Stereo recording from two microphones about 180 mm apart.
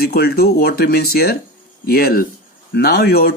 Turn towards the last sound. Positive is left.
turn(degrees=60)  # may be behind; listen again after turning